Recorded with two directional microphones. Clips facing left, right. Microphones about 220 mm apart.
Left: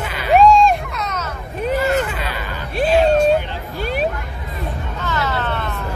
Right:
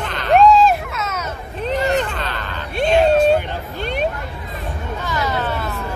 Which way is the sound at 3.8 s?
5° left (ahead or behind).